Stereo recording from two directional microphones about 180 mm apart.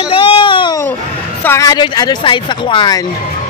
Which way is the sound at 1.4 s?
15° left (ahead or behind).